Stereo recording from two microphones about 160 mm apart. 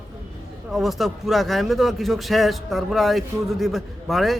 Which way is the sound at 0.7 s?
Centre (ahead or behind).